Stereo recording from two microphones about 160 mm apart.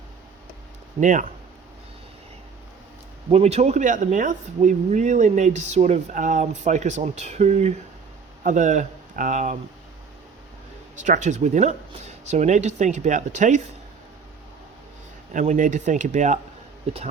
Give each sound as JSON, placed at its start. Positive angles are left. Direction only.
{"t": 0.9, "sound": "speech", "side_deg": -50}
{"t": 3.2, "sound": "speech", "side_deg": -40}
{"t": 11.0, "sound": "speech", "side_deg": -50}
{"t": 15.3, "sound": "speech", "side_deg": -55}